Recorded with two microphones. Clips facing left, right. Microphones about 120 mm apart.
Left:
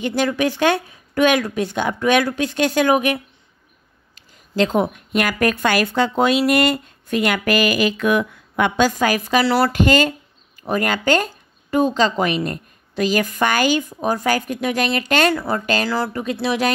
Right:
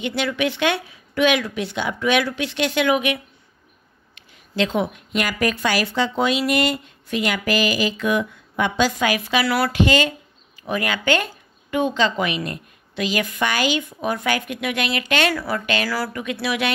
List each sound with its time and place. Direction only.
0.0 s a woman's voice: 40° left (ahead or behind)
9.7 s a sound: 45° left (ahead or behind)
10.6 s a woman's voice: 40° left (ahead or behind)
15.3 s a woman's voice: 25° left (ahead or behind)
15.6 s speech: 35° left (ahead or behind)
15.9 s a woman's voice: 20° left (ahead or behind)